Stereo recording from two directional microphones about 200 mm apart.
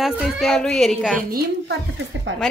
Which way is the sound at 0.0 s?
Centre (ahead or behind).